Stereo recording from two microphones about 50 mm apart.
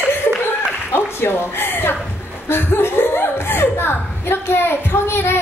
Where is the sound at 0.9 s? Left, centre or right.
Left.